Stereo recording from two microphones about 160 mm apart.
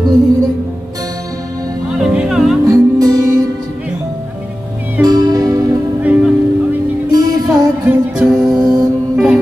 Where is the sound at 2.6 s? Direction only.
25° right (ahead or behind).